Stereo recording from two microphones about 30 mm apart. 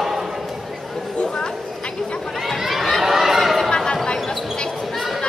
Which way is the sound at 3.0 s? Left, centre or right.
Centre.